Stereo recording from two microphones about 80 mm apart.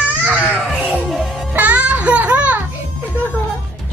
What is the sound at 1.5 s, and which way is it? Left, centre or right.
Music, centre.